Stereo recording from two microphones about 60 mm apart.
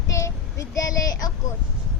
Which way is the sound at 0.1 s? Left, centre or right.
Left.